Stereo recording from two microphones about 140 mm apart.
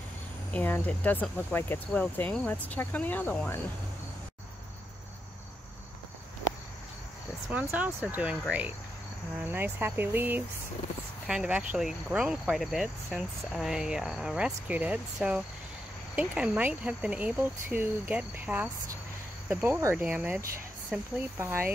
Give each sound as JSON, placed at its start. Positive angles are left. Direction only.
{"t": 0.5, "sound": "speech", "side_deg": 10}
{"t": 7.5, "sound": "speech", "side_deg": -10}
{"t": 11.2, "sound": "cricket", "side_deg": -5}
{"t": 16.2, "sound": "speech", "side_deg": -10}